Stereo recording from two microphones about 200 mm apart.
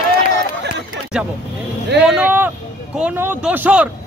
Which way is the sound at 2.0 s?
5° right (ahead or behind).